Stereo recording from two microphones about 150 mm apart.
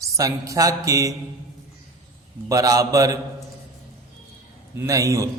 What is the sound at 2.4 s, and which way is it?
Speech, 20° right (ahead or behind).